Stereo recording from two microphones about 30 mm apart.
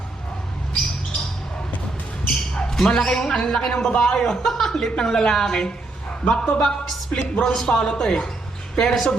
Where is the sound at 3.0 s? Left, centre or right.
Centre.